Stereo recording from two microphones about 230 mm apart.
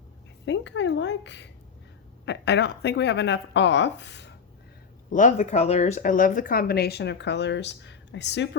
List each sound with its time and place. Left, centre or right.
0.4 s speech: left
5.1 s speech: left